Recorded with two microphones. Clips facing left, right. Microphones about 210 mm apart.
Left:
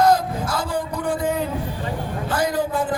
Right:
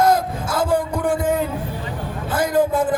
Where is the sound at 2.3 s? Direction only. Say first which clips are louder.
Right 4 dB; 50° right (ahead or behind).